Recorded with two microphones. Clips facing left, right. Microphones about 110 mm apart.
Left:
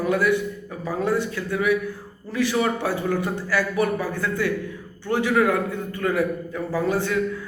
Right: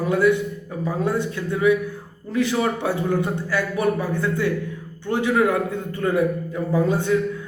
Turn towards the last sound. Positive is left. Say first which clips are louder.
# right 3 dB
turn(degrees=-20)  # may be behind; listen again after turning